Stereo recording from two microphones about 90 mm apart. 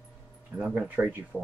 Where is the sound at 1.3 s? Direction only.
5° left (ahead or behind).